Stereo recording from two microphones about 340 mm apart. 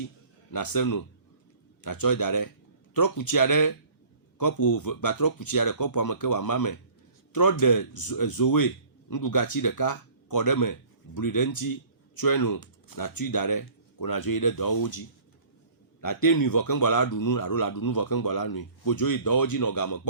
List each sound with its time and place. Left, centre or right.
0.5 s speech: left
1.8 s a man's voice: left
4.4 s a man's voice: left
16.0 s a man's voice: left